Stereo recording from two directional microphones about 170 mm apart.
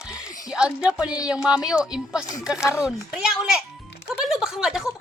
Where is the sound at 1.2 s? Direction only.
5° right (ahead or behind).